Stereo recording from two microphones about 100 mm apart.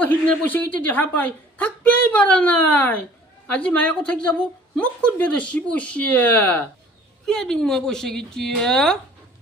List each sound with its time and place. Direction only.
0.0 s a woman's voice: 15° left (ahead or behind)